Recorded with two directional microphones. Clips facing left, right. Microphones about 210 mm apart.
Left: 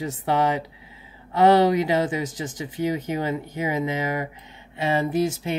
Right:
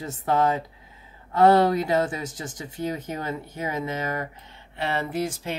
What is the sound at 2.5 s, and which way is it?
Speech, 90° left.